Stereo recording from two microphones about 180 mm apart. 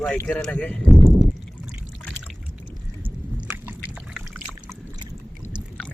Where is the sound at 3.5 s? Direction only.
10° right (ahead or behind).